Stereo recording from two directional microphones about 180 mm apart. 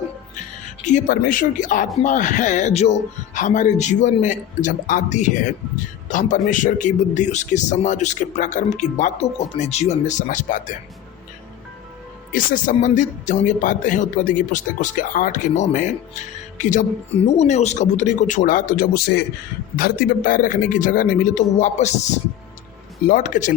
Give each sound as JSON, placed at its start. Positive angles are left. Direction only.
{"t": 0.9, "sound": "speech", "side_deg": 45}
{"t": 12.3, "sound": "speech", "side_deg": 50}